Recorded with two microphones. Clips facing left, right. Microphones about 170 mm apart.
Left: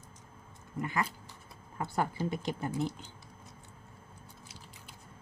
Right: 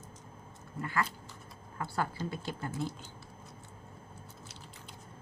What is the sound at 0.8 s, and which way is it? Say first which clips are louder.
Speech: left 1 dB; 20° left (ahead or behind).